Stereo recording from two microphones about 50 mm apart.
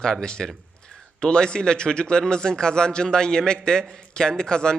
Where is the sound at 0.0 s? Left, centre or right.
Centre.